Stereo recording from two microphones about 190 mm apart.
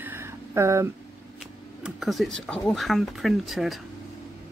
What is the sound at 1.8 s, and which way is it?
Speech, centre (ahead or behind).